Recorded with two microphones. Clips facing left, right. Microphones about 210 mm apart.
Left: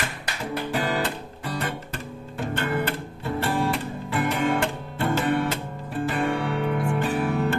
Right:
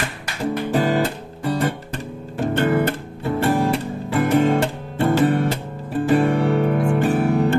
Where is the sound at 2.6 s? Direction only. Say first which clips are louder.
Right 8 dB; 45° right (ahead or behind).